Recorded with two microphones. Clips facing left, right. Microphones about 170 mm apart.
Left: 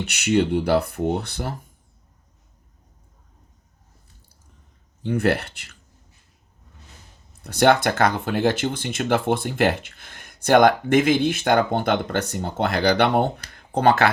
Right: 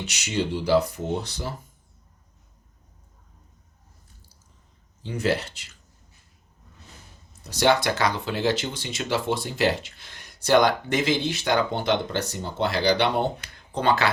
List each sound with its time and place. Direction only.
0.0 s speech: 60° left (ahead or behind)
5.0 s speech: 60° left (ahead or behind)
7.4 s speech: 55° left (ahead or behind)